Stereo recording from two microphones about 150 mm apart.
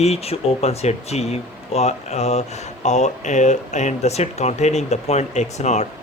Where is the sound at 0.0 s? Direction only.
45° left (ahead or behind).